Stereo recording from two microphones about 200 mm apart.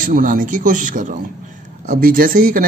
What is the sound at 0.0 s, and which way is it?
A man's voice, 45° right (ahead or behind).